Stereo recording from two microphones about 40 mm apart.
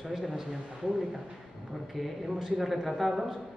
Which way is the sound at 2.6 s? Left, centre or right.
Centre.